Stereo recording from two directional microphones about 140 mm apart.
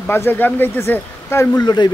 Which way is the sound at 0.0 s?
15° left (ahead or behind).